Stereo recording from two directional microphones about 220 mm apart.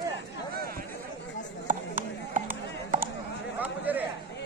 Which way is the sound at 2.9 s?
35° right (ahead or behind).